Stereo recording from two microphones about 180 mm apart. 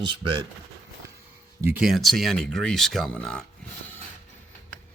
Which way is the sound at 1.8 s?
Centre (ahead or behind).